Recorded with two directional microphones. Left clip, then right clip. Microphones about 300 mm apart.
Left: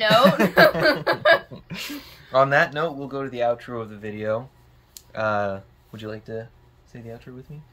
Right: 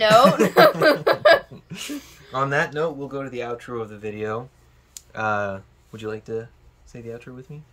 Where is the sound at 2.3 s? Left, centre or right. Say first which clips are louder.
Left 4 dB; centre.